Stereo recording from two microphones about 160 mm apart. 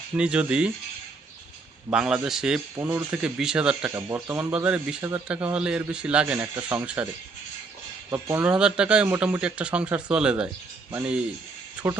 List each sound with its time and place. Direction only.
0.2 s a man's voice: 5° right (ahead or behind)
1.9 s a man's voice: 5° right (ahead or behind)
8.1 s speech: 20° right (ahead or behind)
8.4 s a man's voice: 5° right (ahead or behind)